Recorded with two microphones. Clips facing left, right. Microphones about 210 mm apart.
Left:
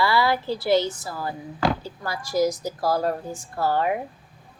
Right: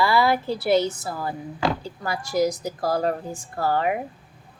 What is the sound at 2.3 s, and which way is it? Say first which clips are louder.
Speech: even; 15° right (ahead or behind).